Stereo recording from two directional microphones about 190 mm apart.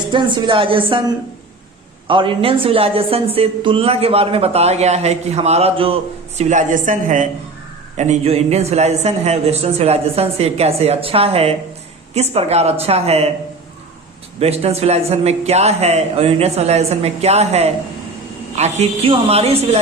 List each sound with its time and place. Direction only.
0.1 s a woman's voice: 25° right (ahead or behind)
14.3 s a woman's voice: 35° right (ahead or behind)